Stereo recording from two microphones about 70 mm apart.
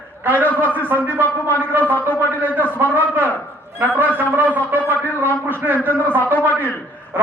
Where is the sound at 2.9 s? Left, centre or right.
Right.